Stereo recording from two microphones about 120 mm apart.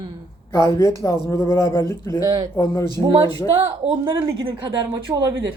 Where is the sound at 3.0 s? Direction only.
45° right (ahead or behind).